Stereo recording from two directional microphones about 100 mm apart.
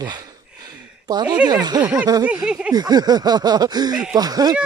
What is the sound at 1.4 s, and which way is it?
Speech, 40° right (ahead or behind).